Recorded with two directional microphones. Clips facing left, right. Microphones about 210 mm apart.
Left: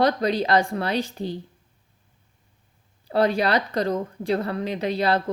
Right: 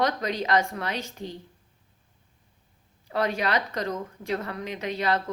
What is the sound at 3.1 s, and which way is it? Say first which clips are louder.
A woman's voice: left 6 dB; 35° left (ahead or behind).